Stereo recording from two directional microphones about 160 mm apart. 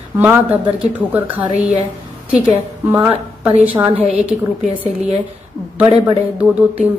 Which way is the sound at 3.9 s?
40° right (ahead or behind).